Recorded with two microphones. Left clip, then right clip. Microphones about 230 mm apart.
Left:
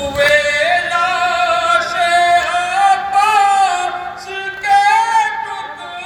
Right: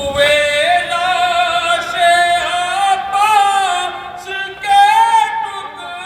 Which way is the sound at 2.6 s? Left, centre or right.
Right.